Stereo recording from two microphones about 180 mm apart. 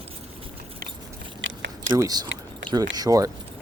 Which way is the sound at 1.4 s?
90° right.